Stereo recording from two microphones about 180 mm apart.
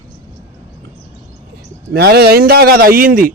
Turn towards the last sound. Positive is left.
turn(degrees=-55)  # may be behind; listen again after turning